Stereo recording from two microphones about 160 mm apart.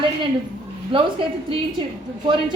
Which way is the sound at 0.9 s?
30° right (ahead or behind).